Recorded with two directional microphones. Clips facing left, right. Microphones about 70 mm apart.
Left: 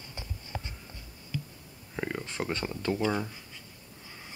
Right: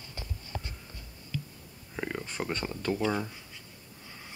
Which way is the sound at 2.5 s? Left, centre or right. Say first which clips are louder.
Even; centre.